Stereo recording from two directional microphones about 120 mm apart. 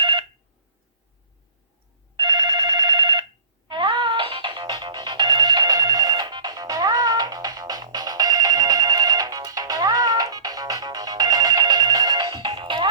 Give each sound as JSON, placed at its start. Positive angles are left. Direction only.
{"t": 0.0, "sound": "a sound", "side_deg": -45}
{"t": 2.1, "sound": "telephone bell ringing", "side_deg": -35}
{"t": 3.7, "sound": "music", "side_deg": -40}